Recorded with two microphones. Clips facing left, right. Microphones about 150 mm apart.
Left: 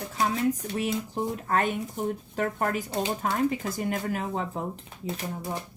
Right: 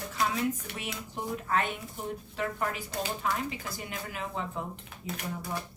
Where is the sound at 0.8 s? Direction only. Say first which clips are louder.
Left 9 dB; 35° left (ahead or behind).